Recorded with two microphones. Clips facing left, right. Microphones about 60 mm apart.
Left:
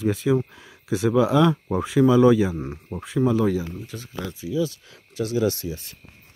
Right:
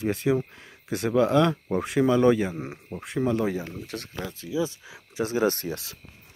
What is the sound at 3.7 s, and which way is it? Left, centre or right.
Speech, right.